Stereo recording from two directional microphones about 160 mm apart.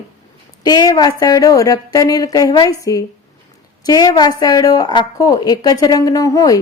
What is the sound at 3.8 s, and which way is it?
A woman's voice, 25° left (ahead or behind).